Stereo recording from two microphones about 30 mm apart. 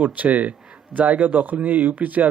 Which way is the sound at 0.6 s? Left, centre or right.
Right.